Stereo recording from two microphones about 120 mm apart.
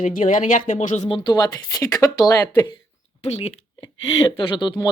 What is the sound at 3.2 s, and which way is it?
Speech, 60° left (ahead or behind).